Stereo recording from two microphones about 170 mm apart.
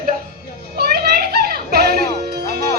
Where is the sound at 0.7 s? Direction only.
65° right (ahead or behind).